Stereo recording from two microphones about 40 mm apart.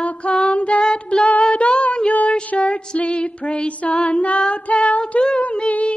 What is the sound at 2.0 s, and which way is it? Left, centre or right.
Music, left.